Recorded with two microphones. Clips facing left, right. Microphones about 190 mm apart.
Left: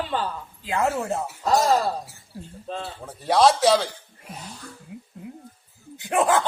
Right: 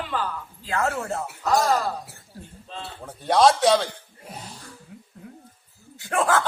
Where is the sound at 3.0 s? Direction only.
Centre (ahead or behind).